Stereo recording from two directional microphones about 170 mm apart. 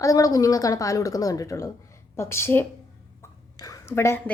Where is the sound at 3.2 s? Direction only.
20° left (ahead or behind).